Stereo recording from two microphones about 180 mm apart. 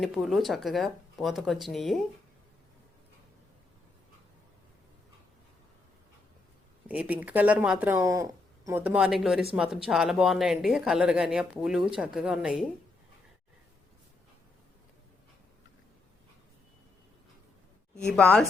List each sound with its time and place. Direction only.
0.0 s speech: centre (ahead or behind)
6.8 s speech: 10° right (ahead or behind)
8.0 s speech: 20° right (ahead or behind); by 12.6 s 5° right (ahead or behind)
17.9 s speech: 5° left (ahead or behind)